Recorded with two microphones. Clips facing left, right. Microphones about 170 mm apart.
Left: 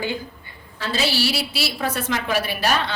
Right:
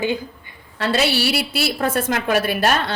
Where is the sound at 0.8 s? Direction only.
65° right (ahead or behind).